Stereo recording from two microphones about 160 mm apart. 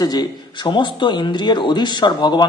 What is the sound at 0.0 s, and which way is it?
A man's voice, 25° left (ahead or behind).